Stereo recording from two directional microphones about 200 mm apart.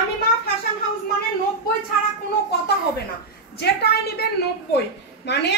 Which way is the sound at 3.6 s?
50° left (ahead or behind).